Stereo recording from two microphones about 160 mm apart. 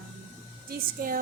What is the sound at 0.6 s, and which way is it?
Speech, 65° right (ahead or behind).